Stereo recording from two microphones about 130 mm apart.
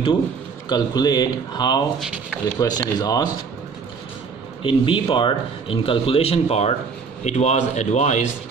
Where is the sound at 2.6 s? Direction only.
30° left (ahead or behind).